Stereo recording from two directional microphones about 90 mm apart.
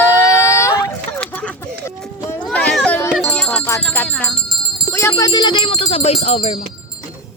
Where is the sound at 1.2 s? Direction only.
15° left (ahead or behind).